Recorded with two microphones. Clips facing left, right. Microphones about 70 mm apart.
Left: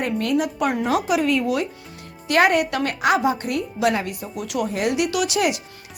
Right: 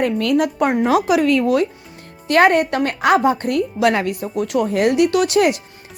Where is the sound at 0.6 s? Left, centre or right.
Right.